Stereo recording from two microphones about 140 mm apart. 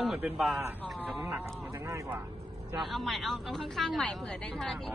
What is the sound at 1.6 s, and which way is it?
Speech, 15° right (ahead or behind).